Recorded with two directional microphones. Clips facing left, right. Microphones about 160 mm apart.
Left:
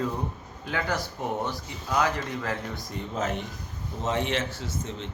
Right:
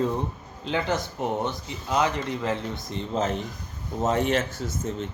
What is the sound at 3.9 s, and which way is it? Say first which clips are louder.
Speech: right 4 dB; 45° right (ahead or behind).